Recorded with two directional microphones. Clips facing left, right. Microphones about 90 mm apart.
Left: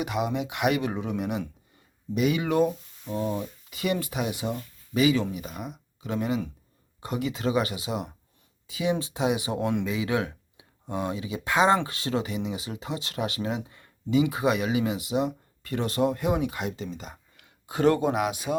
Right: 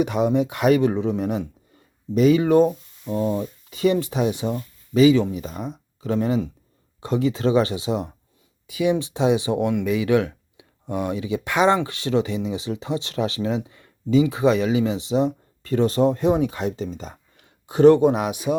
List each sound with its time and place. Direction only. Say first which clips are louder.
0.0 s speech: right 8 dB; 30° right (ahead or behind)
8.6 s speech: right 6 dB; 25° left (ahead or behind)
9.1 s speech: right 6 dB; 30° right (ahead or behind)
9.5 s speech: right 6 dB; 25° left (ahead or behind)
12.5 s speech: right 7 dB; 30° right (ahead or behind)
13.7 s a sound: right 5 dB; 25° left (ahead or behind)
14.4 s speech: right 6 dB; 30° right (ahead or behind)